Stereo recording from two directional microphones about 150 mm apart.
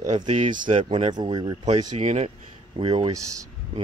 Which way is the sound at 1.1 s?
30° right (ahead or behind).